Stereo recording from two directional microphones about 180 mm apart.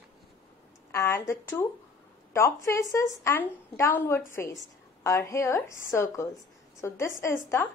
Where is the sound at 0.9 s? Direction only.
15° left (ahead or behind).